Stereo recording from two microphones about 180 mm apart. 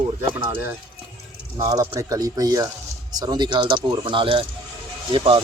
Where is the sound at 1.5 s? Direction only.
20° right (ahead or behind).